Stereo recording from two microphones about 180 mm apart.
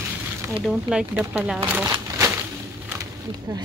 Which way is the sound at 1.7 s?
15° right (ahead or behind).